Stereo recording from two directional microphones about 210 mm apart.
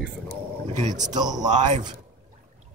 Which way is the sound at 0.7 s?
35° right (ahead or behind).